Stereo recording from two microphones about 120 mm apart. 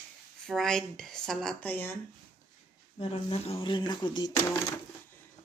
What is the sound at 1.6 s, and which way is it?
Speech, 15° left (ahead or behind).